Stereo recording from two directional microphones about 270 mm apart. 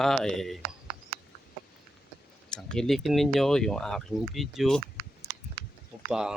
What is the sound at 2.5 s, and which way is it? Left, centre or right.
Speech, centre.